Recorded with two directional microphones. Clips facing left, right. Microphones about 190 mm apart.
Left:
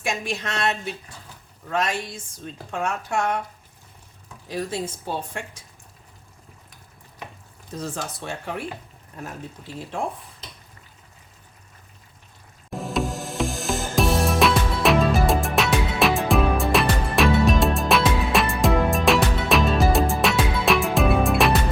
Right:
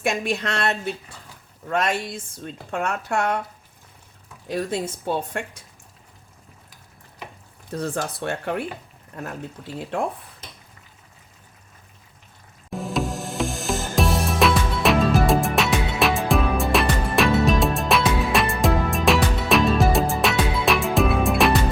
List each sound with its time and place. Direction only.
0.0 s a woman's voice: 55° right (ahead or behind)
1.7 s a woman's voice: 55° right (ahead or behind)
4.4 s a woman's voice: 55° right (ahead or behind)
7.7 s a woman's voice: 60° right (ahead or behind)
12.7 s music: centre (ahead or behind)